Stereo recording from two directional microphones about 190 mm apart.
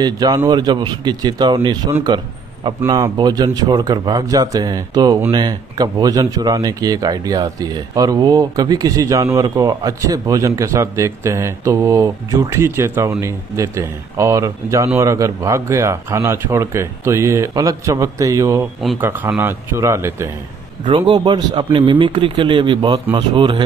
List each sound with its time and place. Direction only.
0.0 s a man's voice: 20° right (ahead or behind)
2.0 s a sound: 25° right (ahead or behind)
2.9 s a man's voice: 20° right (ahead or behind)
20.8 s a man's voice: 25° right (ahead or behind)